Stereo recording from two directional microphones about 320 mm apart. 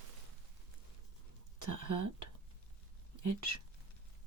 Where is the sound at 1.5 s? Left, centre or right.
Right.